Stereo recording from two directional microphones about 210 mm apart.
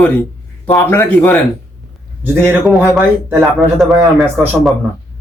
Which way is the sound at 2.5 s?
Centre (ahead or behind).